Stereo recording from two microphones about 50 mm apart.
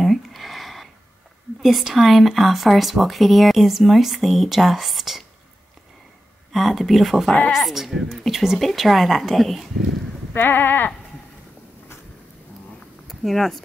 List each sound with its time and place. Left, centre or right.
0.0 s a sound: centre
1.6 s speech: centre
6.5 s speech: centre
10.3 s sheep: left
13.1 s speech: centre